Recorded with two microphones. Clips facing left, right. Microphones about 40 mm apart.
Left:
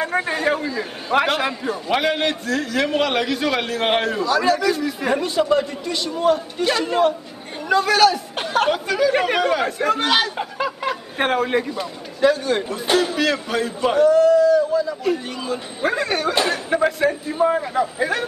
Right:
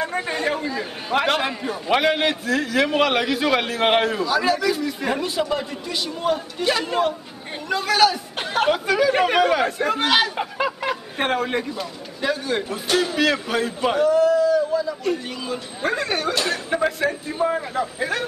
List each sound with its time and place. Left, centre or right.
0.0 s speech: centre
0.7 s a man's voice: centre